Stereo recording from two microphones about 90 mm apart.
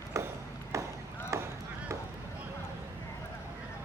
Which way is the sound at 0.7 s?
35° right (ahead or behind).